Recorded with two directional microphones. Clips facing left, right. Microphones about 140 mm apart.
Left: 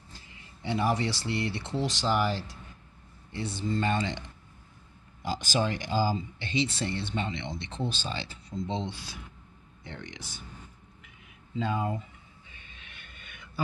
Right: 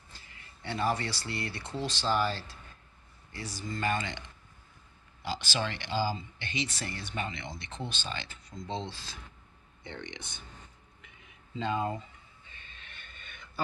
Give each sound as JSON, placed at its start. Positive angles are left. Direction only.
{"t": 0.3, "sound": "speech", "side_deg": 20}
{"t": 5.2, "sound": "speech", "side_deg": 45}
{"t": 6.4, "sound": "speech", "side_deg": 30}
{"t": 9.8, "sound": "speech", "side_deg": 0}
{"t": 11.0, "sound": "a sound", "side_deg": 5}